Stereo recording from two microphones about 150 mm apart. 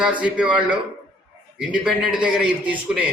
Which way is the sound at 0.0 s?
10° right (ahead or behind).